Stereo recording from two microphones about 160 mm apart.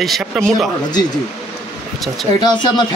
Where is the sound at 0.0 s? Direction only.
Centre (ahead or behind).